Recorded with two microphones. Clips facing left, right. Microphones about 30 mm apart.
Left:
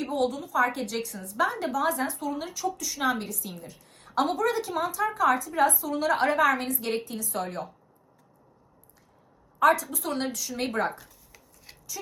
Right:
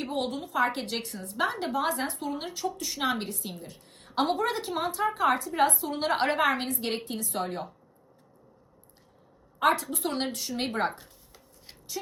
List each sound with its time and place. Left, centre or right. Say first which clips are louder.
0.0 s a woman's voice: left 3 dB; right
9.6 s a woman's voice: left 3 dB; right